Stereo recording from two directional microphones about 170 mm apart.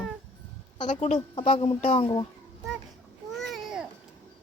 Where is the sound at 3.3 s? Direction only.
Centre (ahead or behind).